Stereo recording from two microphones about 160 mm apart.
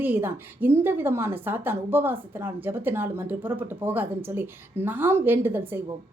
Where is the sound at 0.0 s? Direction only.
15° right (ahead or behind).